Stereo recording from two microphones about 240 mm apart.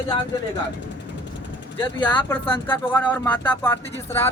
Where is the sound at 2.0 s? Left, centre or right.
Centre.